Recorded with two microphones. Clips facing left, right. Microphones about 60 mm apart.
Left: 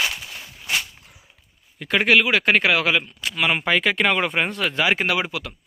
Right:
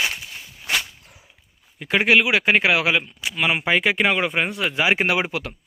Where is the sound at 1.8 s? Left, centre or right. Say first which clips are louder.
Even; centre.